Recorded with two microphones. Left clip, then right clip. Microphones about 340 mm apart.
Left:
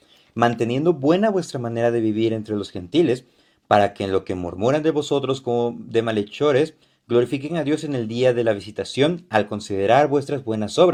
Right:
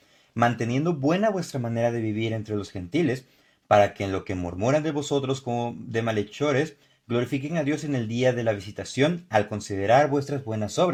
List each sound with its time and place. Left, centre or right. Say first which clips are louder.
0.4 s speech: left 5 dB; right